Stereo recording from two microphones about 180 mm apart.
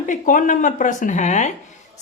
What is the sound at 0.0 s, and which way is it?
A woman's voice, 45° left (ahead or behind).